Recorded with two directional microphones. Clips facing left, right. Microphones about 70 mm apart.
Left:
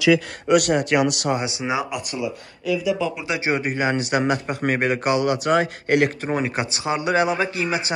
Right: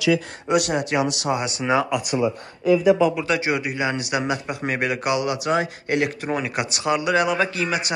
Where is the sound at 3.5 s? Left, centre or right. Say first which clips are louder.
Left 2 dB; left.